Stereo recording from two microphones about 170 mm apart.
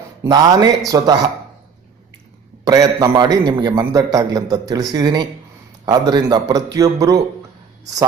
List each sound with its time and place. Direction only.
0.3 s a man's voice: 20° right (ahead or behind)
2.6 s a man's voice: 20° right (ahead or behind)